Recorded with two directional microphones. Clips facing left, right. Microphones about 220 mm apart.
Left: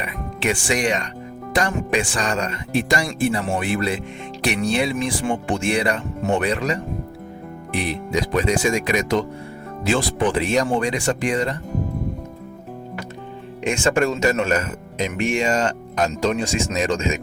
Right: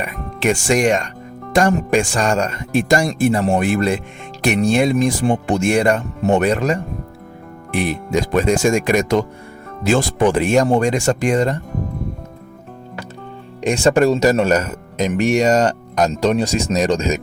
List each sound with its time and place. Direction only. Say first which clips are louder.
0.0 s speech: right 5 dB; 45° right (ahead or behind)
7.8 s speech: right 4 dB; 50° right (ahead or behind)
13.6 s speech: right 5 dB; 35° right (ahead or behind)